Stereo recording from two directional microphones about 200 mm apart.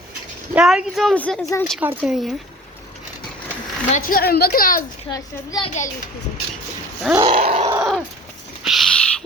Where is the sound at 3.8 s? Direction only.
40° left (ahead or behind).